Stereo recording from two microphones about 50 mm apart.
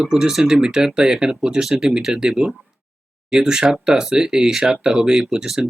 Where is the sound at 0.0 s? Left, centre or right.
Centre.